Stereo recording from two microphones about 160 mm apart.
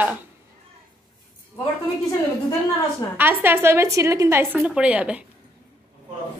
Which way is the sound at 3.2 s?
15° right (ahead or behind).